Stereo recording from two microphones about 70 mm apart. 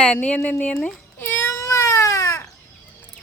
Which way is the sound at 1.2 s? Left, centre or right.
Left.